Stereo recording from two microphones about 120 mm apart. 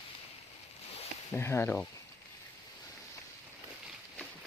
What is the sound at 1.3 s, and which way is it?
Speech, 20° left (ahead or behind).